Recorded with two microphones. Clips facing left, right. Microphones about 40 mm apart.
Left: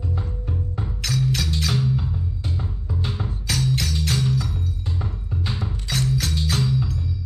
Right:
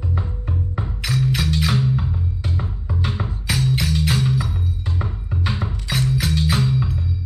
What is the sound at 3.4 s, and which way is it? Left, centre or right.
Music, centre.